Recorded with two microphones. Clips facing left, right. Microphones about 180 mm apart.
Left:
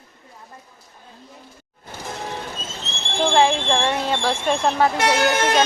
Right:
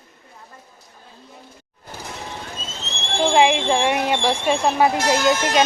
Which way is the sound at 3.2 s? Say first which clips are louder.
Right 1 dB; 10° right (ahead or behind).